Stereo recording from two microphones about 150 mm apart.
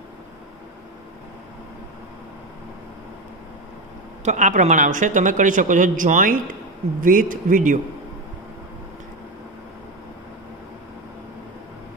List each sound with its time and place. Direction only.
4.2 s speech: 55° right (ahead or behind)